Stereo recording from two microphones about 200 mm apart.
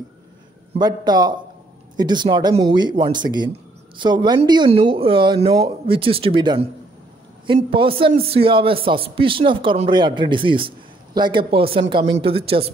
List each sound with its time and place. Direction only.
0.7 s a man's voice: 20° right (ahead or behind)